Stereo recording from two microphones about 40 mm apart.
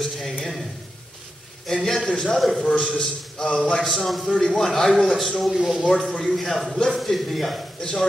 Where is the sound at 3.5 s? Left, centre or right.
Centre.